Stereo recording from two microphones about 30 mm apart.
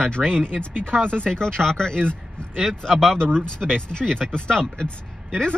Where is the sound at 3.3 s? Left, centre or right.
Left.